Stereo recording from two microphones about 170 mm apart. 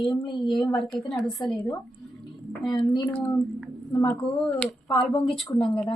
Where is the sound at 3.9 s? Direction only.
20° left (ahead or behind).